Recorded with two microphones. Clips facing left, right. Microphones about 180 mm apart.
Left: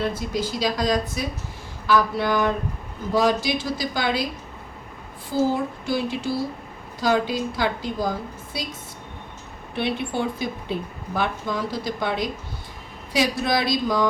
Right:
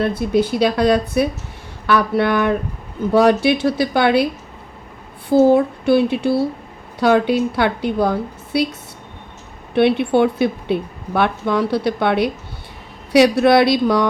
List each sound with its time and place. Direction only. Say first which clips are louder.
0.0 s a woman's voice: right 8 dB; 60° right (ahead or behind)
5.3 s a woman's voice: right 10 dB; 60° right (ahead or behind)
9.7 s a woman's voice: right 11 dB; 65° right (ahead or behind)